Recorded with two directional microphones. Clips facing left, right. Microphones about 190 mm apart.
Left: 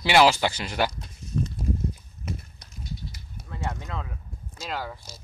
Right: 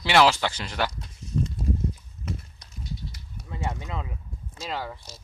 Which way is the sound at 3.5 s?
15° right (ahead or behind).